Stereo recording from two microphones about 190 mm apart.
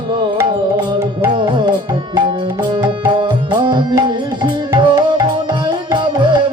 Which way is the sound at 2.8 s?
25° right (ahead or behind).